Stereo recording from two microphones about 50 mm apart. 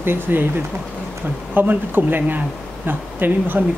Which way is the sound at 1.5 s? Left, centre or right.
Right.